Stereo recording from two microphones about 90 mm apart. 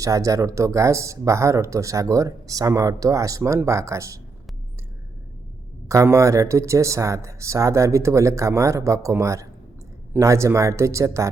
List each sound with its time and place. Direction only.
0.0 s speech: 40° right (ahead or behind)
5.9 s speech: 35° right (ahead or behind)